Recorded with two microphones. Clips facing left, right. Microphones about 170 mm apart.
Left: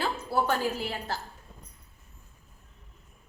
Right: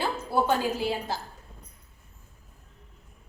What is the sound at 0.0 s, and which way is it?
A woman's voice, 15° right (ahead or behind).